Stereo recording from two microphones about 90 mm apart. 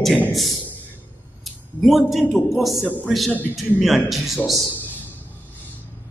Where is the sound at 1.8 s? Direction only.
Centre (ahead or behind).